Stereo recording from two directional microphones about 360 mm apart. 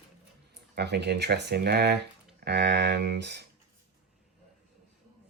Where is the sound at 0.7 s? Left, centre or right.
Right.